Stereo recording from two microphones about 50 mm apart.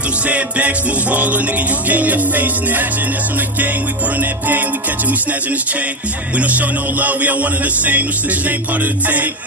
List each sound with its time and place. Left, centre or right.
0.3 s music: right
1.9 s a man's voice: right
4.2 s a man's voice: right
6.3 s a man's voice: right